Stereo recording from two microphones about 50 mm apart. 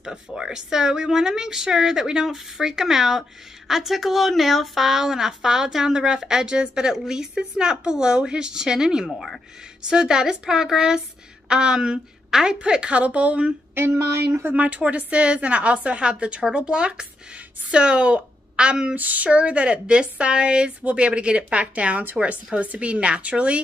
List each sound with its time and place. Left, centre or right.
0.5 s a woman's voice: centre
14.5 s a woman's voice: right
18.9 s speech: right